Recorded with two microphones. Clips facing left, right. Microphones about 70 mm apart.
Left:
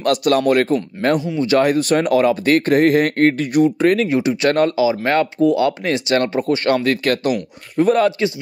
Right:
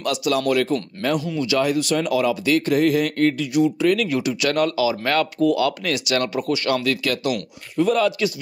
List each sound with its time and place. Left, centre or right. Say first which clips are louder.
0.0 s speech: left 6 dB; left